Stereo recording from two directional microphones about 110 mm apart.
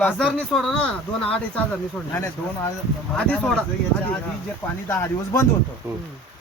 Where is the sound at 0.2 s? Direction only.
5° left (ahead or behind).